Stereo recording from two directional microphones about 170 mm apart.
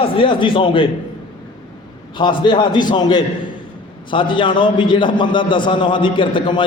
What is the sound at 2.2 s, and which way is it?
A man's voice, 30° left (ahead or behind).